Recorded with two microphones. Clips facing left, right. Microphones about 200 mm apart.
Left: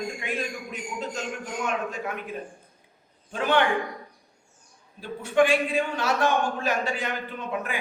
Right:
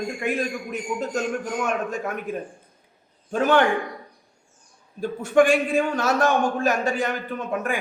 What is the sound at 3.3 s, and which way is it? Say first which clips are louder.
Speech: right 5 dB; 45° right (ahead or behind).